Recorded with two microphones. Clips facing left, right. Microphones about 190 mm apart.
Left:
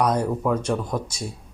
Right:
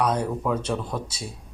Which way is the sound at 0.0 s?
10° left (ahead or behind).